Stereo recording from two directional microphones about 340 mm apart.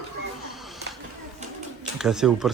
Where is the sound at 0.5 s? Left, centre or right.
Centre.